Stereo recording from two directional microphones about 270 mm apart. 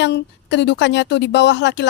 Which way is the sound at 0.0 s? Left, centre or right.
Left.